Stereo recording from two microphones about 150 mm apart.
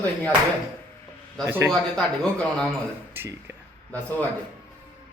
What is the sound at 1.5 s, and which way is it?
Speech, 15° right (ahead or behind).